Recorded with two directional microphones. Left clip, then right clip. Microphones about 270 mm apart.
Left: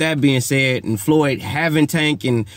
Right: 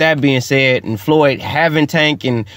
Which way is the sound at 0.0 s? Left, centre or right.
Centre.